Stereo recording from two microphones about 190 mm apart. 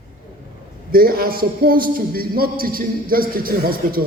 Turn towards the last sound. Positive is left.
turn(degrees=-50)  # may be behind; listen again after turning